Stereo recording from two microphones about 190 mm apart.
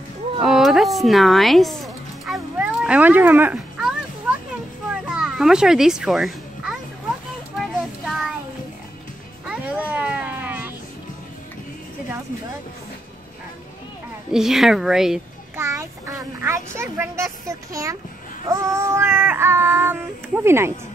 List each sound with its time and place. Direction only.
0.4 s music: centre (ahead or behind)
5.0 s music: 5° right (ahead or behind)
8.0 s child singing: centre (ahead or behind)
9.5 s a sound: 10° right (ahead or behind)
14.3 s a woman's voice: centre (ahead or behind)
15.5 s child singing: 15° right (ahead or behind)